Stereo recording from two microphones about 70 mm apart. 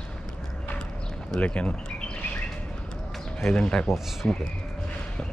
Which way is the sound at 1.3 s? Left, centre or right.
Centre.